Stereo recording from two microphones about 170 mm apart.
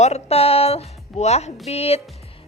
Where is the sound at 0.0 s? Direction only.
40° left (ahead or behind).